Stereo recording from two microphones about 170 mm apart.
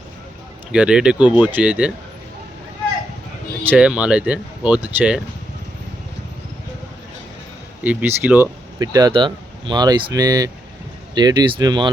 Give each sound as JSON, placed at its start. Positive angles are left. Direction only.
{"t": 0.7, "sound": "speech", "side_deg": -5}
{"t": 3.6, "sound": "speech", "side_deg": -10}
{"t": 7.9, "sound": "speech", "side_deg": -10}